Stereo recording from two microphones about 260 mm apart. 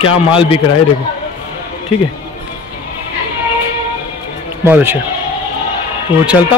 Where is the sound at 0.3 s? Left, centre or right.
Centre.